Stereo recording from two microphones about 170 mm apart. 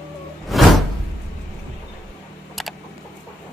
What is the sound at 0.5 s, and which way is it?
Music, centre (ahead or behind).